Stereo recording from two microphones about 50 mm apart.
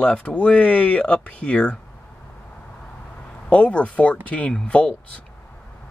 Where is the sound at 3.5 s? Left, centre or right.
Left.